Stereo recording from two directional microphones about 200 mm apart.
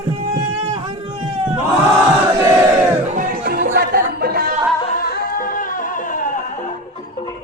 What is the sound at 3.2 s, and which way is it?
Music, 45° right (ahead or behind).